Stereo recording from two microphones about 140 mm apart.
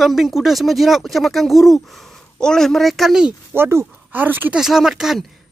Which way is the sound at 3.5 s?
15° right (ahead or behind).